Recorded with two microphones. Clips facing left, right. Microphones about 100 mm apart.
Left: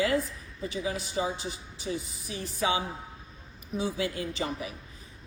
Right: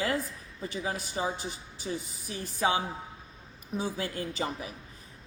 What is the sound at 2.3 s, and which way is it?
Speech, 40° right (ahead or behind).